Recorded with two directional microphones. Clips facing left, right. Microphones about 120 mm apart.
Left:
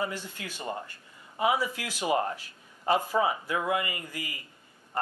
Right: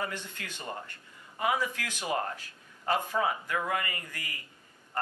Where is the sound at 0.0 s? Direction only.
10° left (ahead or behind).